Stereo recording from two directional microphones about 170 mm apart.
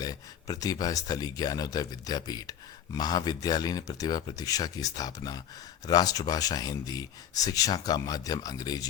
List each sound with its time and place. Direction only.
0.0 s speech: 20° left (ahead or behind)